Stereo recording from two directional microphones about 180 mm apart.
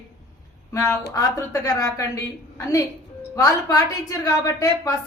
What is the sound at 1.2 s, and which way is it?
A woman's voice, 20° left (ahead or behind).